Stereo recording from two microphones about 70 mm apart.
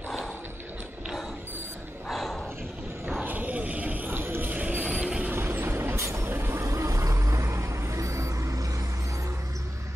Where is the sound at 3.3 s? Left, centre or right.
Right.